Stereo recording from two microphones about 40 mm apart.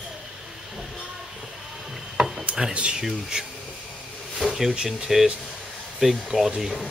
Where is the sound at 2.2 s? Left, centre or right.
Right.